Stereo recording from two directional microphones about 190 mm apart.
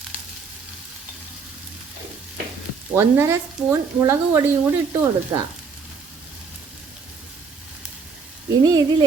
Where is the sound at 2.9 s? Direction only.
15° right (ahead or behind).